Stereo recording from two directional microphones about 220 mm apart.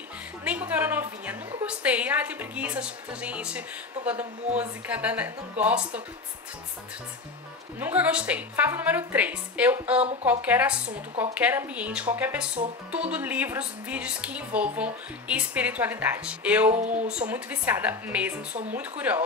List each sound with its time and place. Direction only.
0.4 s a woman's voice: 5° right (ahead or behind)
7.8 s a woman's voice: 5° right (ahead or behind)
16.7 s speech: 30° right (ahead or behind)
17.3 s a woman's voice: 10° right (ahead or behind)